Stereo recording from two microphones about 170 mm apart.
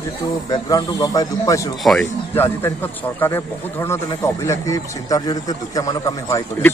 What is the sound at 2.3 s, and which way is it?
Speech, 15° left (ahead or behind).